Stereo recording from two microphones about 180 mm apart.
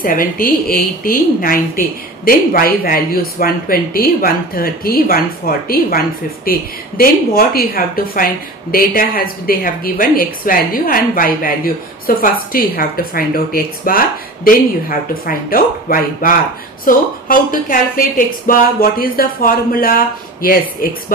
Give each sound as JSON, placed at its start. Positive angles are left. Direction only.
{"t": 0.0, "sound": "a woman's voice", "side_deg": 50}